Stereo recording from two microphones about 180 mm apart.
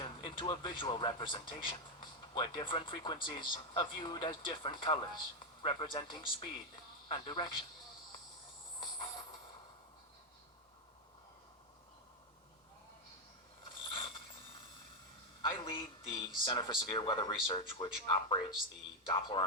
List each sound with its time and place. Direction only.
0.0 s speech: 25° left (ahead or behind)
13.7 s pulleys: 30° left (ahead or behind)
15.4 s speech: 30° left (ahead or behind)